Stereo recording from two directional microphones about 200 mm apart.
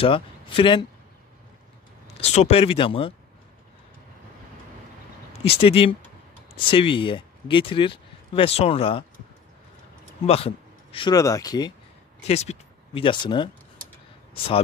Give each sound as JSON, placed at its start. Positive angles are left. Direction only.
{"t": 0.0, "sound": "speech", "side_deg": 25}
{"t": 2.1, "sound": "speech", "side_deg": 35}
{"t": 5.6, "sound": "speech", "side_deg": 30}
{"t": 10.2, "sound": "speech", "side_deg": 30}
{"t": 12.3, "sound": "speech", "side_deg": 30}